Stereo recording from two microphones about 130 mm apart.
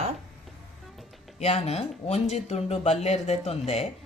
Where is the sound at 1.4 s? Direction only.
55° left (ahead or behind).